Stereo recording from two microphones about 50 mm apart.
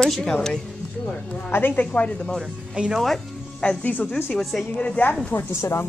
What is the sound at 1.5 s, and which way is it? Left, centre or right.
Speech, left.